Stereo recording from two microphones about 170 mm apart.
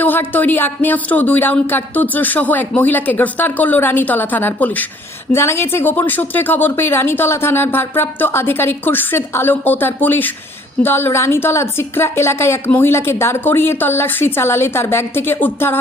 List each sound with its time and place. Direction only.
0.0 s speech: 10° left (ahead or behind)